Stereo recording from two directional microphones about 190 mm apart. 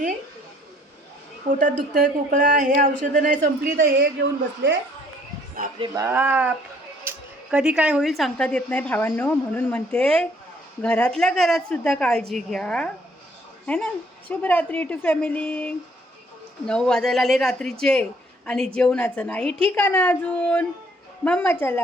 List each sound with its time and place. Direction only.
1.9 s speech: 50° right (ahead or behind); by 4.8 s 70° right (ahead or behind)
5.8 s a woman's voice: 15° right (ahead or behind); by 21.8 s 10° left (ahead or behind)